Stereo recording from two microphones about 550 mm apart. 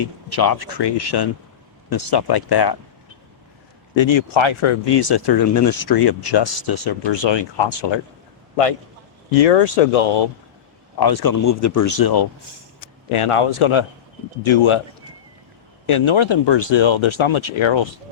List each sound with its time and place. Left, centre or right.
0.0 s speech: left
3.9 s speech: left
9.4 s speech: left
11.0 s speech: left
11.9 s speech: left
13.1 s speech: left
15.9 s speech: left